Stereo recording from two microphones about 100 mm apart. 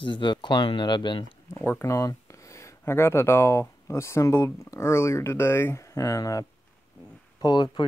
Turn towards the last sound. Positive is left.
turn(degrees=45)  # may be behind; listen again after turning